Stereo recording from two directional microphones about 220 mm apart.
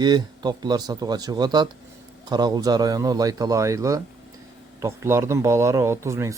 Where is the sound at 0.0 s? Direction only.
20° right (ahead or behind).